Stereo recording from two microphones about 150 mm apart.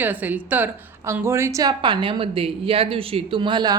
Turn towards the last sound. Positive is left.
turn(degrees=-30)  # may be behind; listen again after turning